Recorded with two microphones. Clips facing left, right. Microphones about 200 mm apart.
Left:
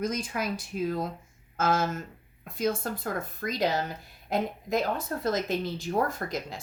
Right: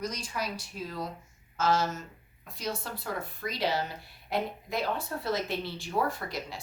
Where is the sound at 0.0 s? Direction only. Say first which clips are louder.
Left 5 dB; 50° left (ahead or behind).